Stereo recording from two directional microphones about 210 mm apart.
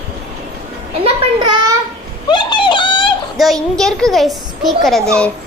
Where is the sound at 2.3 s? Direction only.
20° left (ahead or behind).